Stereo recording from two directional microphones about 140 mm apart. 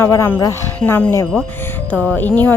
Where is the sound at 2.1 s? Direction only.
10° left (ahead or behind).